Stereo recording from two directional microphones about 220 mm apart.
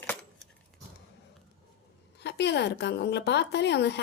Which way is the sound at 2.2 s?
50° left (ahead or behind).